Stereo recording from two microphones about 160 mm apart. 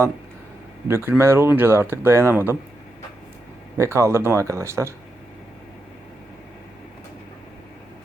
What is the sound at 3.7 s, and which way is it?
Speech, 15° right (ahead or behind).